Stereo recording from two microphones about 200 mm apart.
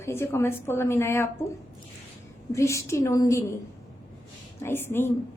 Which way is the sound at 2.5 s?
15° left (ahead or behind).